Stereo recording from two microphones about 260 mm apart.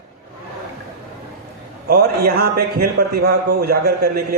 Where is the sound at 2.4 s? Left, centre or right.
Right.